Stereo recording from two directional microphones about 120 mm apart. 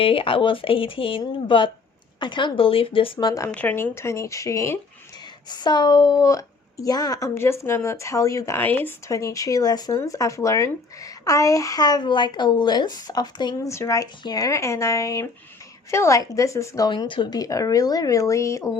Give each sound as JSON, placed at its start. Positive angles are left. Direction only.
{"t": 0.0, "sound": "speech", "side_deg": 50}
{"t": 3.2, "sound": "a woman's voice", "side_deg": 30}
{"t": 3.5, "sound": "a woman's voice", "side_deg": 15}
{"t": 5.5, "sound": "a woman's voice", "side_deg": 35}
{"t": 8.6, "sound": "speech", "side_deg": 15}
{"t": 9.0, "sound": "a woman's voice", "side_deg": 25}
{"t": 13.7, "sound": "a woman's voice", "side_deg": 25}
{"t": 16.9, "sound": "speech", "side_deg": 40}